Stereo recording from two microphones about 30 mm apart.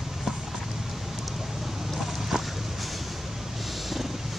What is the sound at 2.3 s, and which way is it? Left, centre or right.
Boat, centre.